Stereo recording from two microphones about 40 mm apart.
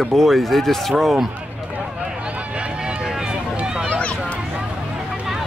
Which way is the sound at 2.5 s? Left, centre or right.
Right.